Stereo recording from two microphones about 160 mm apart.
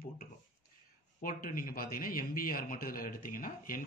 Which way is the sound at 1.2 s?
60° left (ahead or behind).